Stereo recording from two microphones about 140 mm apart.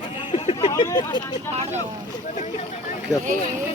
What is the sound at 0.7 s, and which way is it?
Speech, 30° left (ahead or behind).